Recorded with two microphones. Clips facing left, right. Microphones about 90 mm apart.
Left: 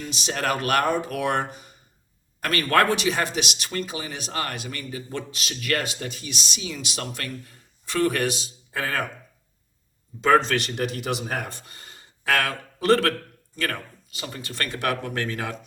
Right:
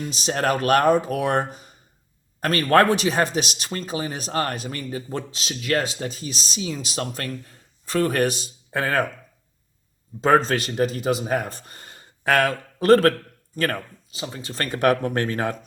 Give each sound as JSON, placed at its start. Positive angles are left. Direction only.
{"t": 0.1, "sound": "speech", "side_deg": -35}
{"t": 10.2, "sound": "speech", "side_deg": -40}
{"t": 14.2, "sound": "speech", "side_deg": -25}